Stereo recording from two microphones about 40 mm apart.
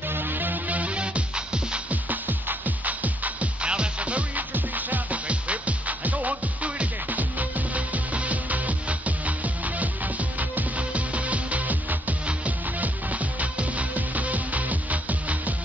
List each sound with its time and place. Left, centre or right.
0.1 s music: right
1.9 s music: right
3.6 s music: right
4.6 s music: right